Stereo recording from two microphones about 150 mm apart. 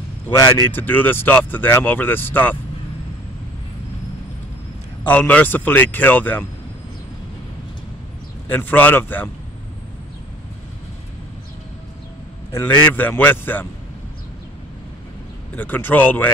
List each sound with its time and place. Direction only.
0.4 s speech: 30° left (ahead or behind)
0.7 s speech: 10° left (ahead or behind)
5.0 s speech: 10° left (ahead or behind)
8.5 s speech: 10° left (ahead or behind)
12.5 s speech: 10° left (ahead or behind)
15.5 s speech: 10° left (ahead or behind)